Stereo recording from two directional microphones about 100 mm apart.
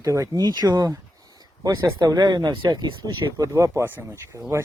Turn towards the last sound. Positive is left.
turn(degrees=-30)  # may be behind; listen again after turning